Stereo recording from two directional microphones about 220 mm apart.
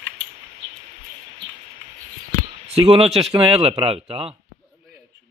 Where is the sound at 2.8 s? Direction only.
25° right (ahead or behind).